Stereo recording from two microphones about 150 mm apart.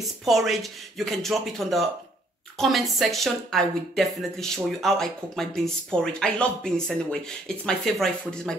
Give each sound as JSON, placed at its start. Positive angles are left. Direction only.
{"t": 0.2, "sound": "a woman's voice", "side_deg": 0}